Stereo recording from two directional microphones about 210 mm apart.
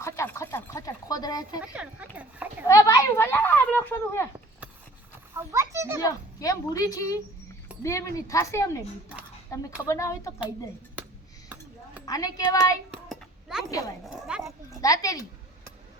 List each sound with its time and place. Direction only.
0.0 s speech: 15° left (ahead or behind)
1.7 s speech: 5° right (ahead or behind)
2.6 s speech: 15° left (ahead or behind)
5.3 s a child's voice: 10° right (ahead or behind)
6.1 s speech: 15° left (ahead or behind)
12.0 s speech: 15° left (ahead or behind)
12.9 s a sound: centre (ahead or behind)
13.7 s speech: 15° left (ahead or behind)
14.0 s speech: 5° right (ahead or behind)
14.7 s speech: 15° left (ahead or behind)